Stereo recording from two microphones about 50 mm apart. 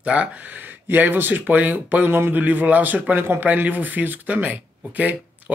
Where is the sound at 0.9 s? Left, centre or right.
Right.